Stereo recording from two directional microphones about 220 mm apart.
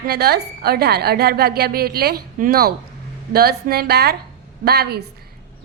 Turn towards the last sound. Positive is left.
turn(degrees=-45)  # may be behind; listen again after turning